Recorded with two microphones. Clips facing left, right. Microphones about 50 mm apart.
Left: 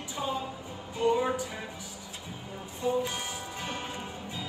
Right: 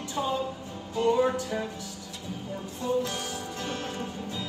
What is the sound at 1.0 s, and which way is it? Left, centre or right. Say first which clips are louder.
Music: right 3 dB; centre.